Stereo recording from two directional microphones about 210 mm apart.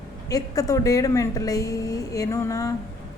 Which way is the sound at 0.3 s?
15° left (ahead or behind).